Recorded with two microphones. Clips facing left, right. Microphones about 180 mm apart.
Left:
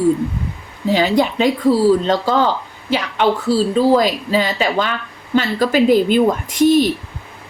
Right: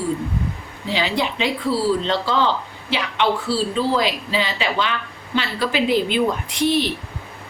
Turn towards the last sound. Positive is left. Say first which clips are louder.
# left 7 dB
turn(degrees=45)  # may be behind; listen again after turning